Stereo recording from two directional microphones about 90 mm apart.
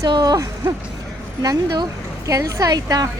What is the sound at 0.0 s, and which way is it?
A woman's voice, 50° right (ahead or behind).